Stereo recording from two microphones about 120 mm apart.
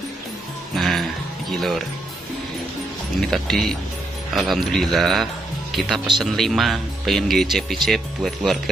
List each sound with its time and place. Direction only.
0.7 s music: centre (ahead or behind)
3.2 s speech: centre (ahead or behind)